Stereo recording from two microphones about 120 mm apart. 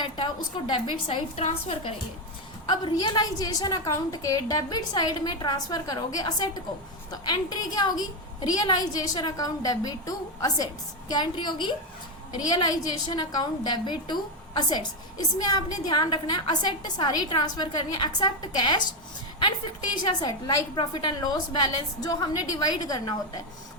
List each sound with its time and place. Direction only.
0.7 s a woman's voice: 45° left (ahead or behind)
1.4 s a woman's voice: 55° left (ahead or behind)
2.6 s a woman's voice: 35° left (ahead or behind)
20.0 s a woman's voice: 35° left (ahead or behind)